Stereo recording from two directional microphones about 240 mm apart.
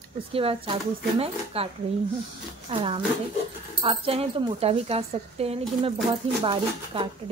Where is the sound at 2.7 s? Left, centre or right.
Right.